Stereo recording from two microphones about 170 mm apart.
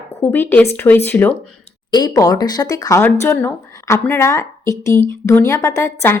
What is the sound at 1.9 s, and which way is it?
A woman's voice, 25° left (ahead or behind).